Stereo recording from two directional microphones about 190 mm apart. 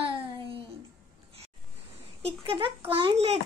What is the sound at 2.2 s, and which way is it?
A child's voice, 30° right (ahead or behind).